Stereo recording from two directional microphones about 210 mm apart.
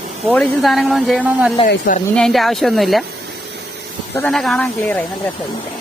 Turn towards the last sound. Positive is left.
turn(degrees=5)  # may be behind; listen again after turning